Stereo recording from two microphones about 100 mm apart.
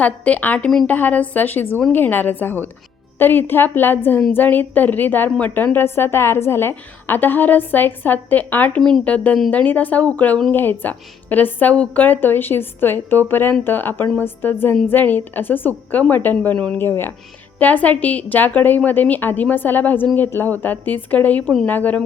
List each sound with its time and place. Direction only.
0.0 s a woman's voice: 15° left (ahead or behind)